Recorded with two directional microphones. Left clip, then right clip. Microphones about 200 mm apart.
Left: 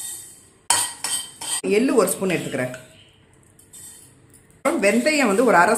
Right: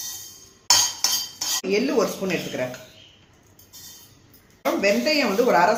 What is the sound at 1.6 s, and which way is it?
Speech, 40° left (ahead or behind).